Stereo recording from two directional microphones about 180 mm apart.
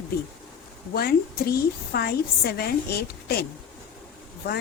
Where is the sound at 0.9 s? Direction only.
55° left (ahead or behind).